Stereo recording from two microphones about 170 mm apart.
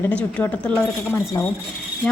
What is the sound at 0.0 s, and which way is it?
Speech, 5° left (ahead or behind).